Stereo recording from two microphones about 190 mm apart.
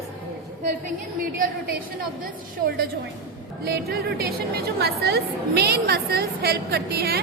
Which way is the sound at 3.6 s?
55° right (ahead or behind).